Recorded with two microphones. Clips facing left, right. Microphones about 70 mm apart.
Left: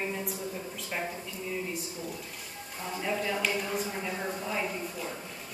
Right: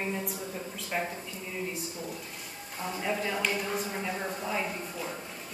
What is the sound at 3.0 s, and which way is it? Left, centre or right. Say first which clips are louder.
A woman's voice: even; centre.